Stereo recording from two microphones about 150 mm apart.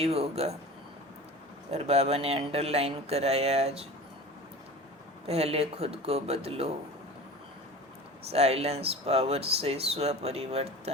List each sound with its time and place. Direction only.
0.0 s speech: 40° right (ahead or behind)
1.7 s speech: 45° right (ahead or behind)
5.2 s speech: 45° right (ahead or behind)
8.3 s speech: 45° right (ahead or behind)